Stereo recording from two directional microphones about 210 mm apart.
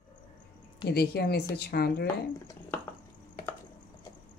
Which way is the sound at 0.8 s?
50° left (ahead or behind).